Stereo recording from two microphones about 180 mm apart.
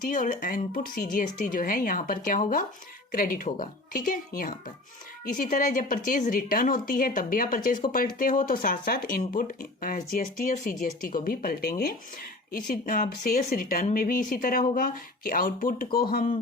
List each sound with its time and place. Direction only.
0.0 s speech: 45° left (ahead or behind)